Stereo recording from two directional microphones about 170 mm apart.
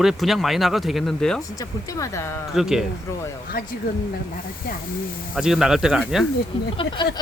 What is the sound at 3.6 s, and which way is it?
Speech, 60° left (ahead or behind).